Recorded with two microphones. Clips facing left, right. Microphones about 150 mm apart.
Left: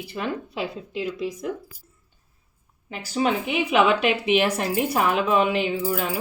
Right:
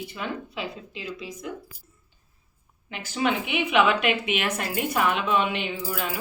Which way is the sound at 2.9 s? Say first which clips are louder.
Left 2 dB; 40° left (ahead or behind).